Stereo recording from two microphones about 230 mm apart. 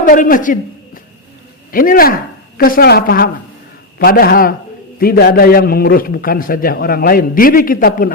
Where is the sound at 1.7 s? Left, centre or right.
Left.